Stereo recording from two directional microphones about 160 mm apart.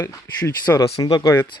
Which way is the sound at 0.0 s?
20° left (ahead or behind).